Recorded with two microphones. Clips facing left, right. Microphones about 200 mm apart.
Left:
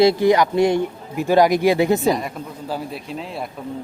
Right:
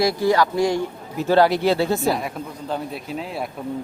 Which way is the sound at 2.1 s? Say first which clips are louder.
Left 1 dB; centre (ahead or behind).